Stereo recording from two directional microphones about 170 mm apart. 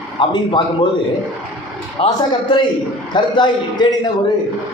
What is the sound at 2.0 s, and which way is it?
A man's voice, 30° left (ahead or behind).